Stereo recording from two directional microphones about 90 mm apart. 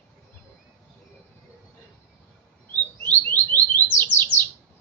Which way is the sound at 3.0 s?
15° left (ahead or behind).